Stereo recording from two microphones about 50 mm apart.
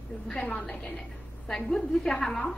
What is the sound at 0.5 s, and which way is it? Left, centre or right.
A woman's voice, left.